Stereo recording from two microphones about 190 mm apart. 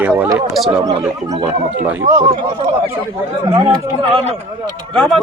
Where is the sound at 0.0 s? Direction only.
10° right (ahead or behind).